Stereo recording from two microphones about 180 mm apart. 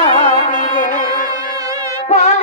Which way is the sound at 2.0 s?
35° left (ahead or behind).